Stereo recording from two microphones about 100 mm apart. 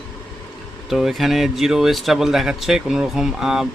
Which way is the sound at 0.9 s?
Centre (ahead or behind).